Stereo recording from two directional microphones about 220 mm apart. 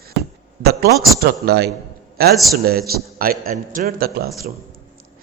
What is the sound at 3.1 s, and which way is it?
A man's voice, 40° right (ahead or behind).